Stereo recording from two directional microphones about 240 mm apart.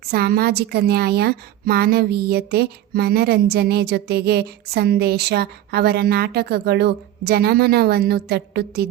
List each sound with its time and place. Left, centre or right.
0.1 s a woman's voice: right